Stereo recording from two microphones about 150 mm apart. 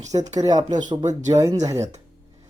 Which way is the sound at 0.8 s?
30° right (ahead or behind).